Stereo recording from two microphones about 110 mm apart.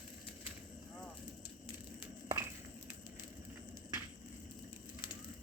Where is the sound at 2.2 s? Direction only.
25° right (ahead or behind).